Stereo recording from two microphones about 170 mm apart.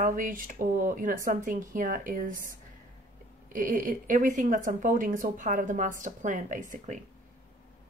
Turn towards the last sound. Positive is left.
turn(degrees=-50)  # may be behind; listen again after turning